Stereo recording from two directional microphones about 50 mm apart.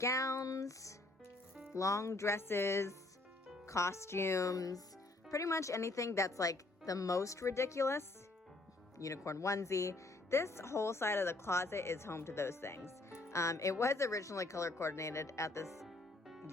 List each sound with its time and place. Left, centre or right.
0.0 s a woman's voice: left
2.4 s speech: left
3.7 s a woman's voice: left
9.0 s speech: left
15.8 s music: centre